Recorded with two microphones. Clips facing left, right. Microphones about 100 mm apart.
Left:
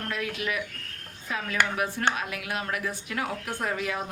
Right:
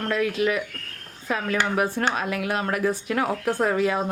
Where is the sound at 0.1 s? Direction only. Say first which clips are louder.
Right 9 dB; 40° right (ahead or behind).